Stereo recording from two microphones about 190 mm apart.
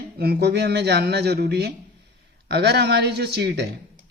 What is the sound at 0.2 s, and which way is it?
Speech, 55° right (ahead or behind).